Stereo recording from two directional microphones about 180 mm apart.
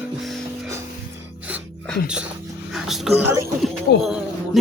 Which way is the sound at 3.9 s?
60° left (ahead or behind).